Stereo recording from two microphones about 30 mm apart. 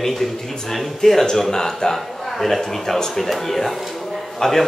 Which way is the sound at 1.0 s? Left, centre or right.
Centre.